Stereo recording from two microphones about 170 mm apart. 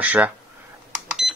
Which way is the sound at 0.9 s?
Centre (ahead or behind).